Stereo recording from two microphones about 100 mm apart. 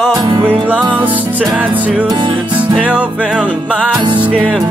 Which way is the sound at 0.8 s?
55° right (ahead or behind).